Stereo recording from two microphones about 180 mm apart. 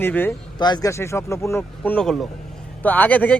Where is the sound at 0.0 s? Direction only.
10° left (ahead or behind).